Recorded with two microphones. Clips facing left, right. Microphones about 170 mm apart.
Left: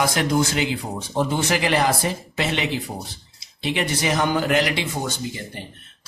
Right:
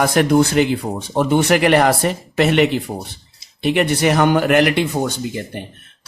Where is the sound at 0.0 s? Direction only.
55° right (ahead or behind).